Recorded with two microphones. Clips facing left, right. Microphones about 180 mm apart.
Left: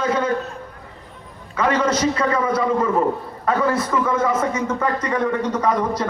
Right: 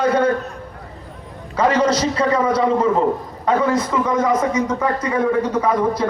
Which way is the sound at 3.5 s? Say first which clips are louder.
Right 2 dB; 20° right (ahead or behind).